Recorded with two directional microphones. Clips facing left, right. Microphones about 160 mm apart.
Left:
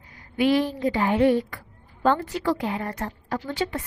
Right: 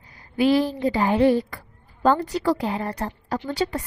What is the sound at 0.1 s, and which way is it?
A woman's voice, 35° right (ahead or behind).